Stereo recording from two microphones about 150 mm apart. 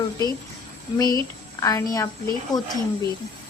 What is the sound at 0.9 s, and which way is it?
Speech, 25° left (ahead or behind).